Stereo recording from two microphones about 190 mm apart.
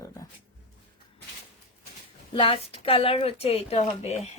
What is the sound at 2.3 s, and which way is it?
Speech, 30° left (ahead or behind).